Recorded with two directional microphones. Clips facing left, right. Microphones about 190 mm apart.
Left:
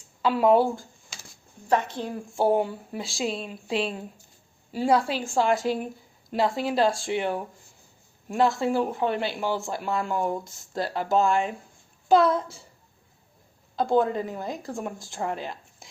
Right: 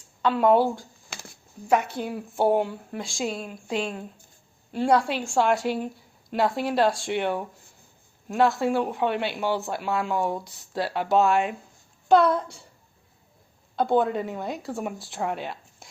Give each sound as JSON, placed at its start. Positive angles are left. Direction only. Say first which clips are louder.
{"t": 0.2, "sound": "speech", "louder": "even", "side_deg": 5}
{"t": 1.1, "sound": "a sound", "louder": "right 7 dB", "side_deg": -60}
{"t": 1.6, "sound": "speech", "louder": "right 1 dB", "side_deg": -10}
{"t": 13.7, "sound": "speech", "louder": "even", "side_deg": 0}